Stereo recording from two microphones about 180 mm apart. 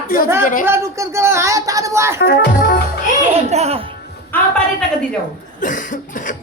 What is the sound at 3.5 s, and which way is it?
Speech, 35° right (ahead or behind).